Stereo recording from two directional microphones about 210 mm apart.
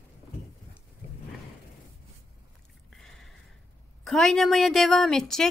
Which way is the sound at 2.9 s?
Centre (ahead or behind).